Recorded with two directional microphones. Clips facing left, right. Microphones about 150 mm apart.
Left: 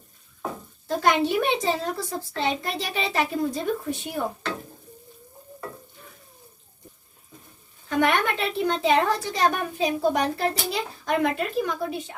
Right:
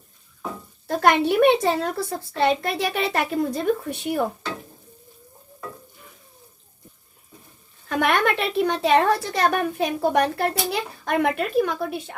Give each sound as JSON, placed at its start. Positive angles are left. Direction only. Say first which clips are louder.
{"t": 0.9, "sound": "a child's voice", "louder": "right 3 dB", "side_deg": -65}
{"t": 7.9, "sound": "a woman's voice", "louder": "right 1 dB", "side_deg": -70}